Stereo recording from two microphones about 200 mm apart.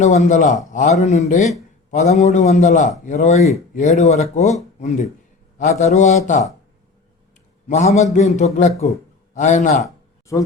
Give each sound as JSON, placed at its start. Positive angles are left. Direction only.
{"t": 0.0, "sound": "a man's voice", "side_deg": 35}
{"t": 7.7, "sound": "a man's voice", "side_deg": 35}
{"t": 9.8, "sound": "a sound", "side_deg": 15}